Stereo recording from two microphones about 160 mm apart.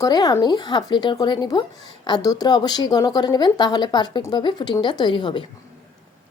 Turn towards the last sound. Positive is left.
turn(degrees=30)  # may be behind; listen again after turning